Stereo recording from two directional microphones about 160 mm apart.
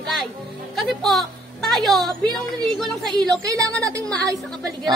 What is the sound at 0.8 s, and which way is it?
Speech, centre (ahead or behind).